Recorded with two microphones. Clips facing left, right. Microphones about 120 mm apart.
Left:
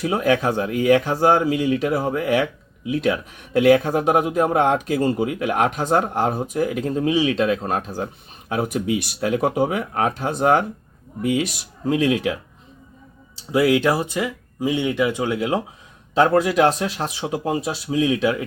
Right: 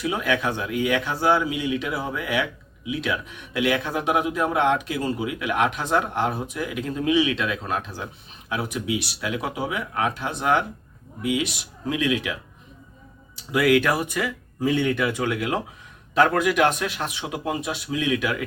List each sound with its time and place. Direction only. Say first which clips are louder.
0.0 s speech: left 5 dB; 40° left (ahead or behind)
13.5 s speech: left 2 dB; 25° left (ahead or behind)